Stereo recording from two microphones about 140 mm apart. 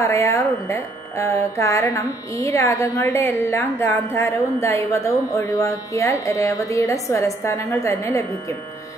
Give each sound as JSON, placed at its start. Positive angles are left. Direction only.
{"t": 0.0, "sound": "speech", "side_deg": 20}